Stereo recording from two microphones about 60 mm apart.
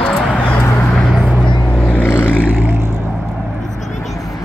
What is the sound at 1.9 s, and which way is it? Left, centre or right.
Vehicle, left.